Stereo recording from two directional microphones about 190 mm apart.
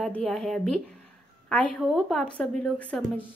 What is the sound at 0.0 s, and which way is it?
Speech, centre (ahead or behind).